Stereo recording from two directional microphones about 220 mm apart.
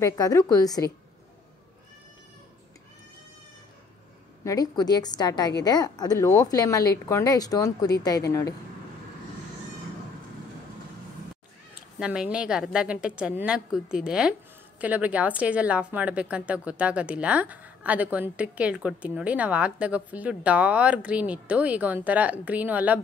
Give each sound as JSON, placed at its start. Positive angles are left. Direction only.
{"t": 0.0, "sound": "speech", "side_deg": 15}
{"t": 4.5, "sound": "speech", "side_deg": 15}
{"t": 12.0, "sound": "a woman's voice", "side_deg": -5}